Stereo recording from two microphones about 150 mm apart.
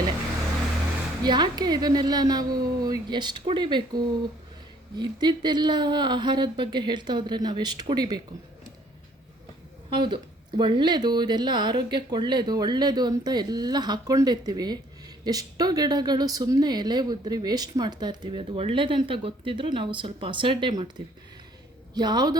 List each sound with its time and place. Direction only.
1.2 s a woman's voice: 30° right (ahead or behind)
9.9 s a woman's voice: 30° right (ahead or behind)
21.9 s a woman's voice: 30° right (ahead or behind)